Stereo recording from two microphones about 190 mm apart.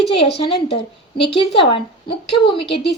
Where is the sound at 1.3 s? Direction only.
30° left (ahead or behind).